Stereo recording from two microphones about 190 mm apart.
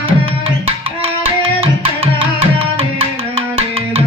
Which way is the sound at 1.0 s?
30° right (ahead or behind).